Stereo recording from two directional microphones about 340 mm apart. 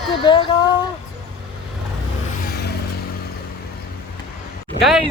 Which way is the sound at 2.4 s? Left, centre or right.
Left.